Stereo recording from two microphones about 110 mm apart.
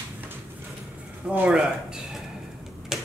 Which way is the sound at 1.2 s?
15° right (ahead or behind).